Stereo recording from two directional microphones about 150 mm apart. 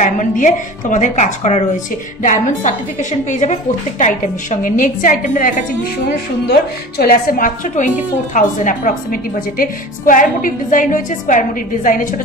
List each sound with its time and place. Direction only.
0.0 s a woman's voice: 55° left (ahead or behind)
6.4 s a woman's voice: 90° left; by 12.1 s 65° left (ahead or behind)